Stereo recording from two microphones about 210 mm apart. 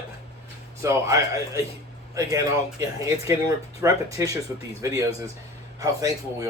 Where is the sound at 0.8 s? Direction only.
15° right (ahead or behind).